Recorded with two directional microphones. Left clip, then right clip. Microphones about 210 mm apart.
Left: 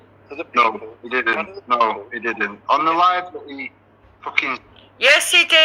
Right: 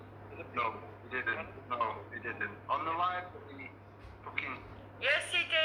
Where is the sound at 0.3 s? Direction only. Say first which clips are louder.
Left 18 dB; 55° left (ahead or behind).